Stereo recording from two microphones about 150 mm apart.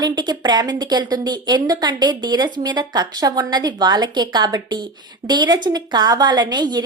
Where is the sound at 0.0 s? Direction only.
30° right (ahead or behind).